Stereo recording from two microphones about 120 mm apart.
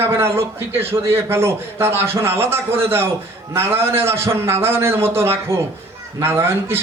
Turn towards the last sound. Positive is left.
turn(degrees=-20)  # may be behind; listen again after turning